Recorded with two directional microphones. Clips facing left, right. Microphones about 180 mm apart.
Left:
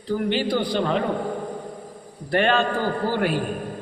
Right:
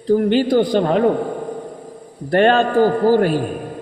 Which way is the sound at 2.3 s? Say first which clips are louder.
Right 7 dB; 45° right (ahead or behind).